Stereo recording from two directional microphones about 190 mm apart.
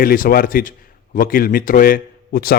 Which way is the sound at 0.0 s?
50° left (ahead or behind).